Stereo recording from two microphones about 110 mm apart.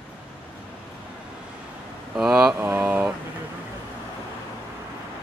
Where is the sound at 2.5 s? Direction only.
15° right (ahead or behind).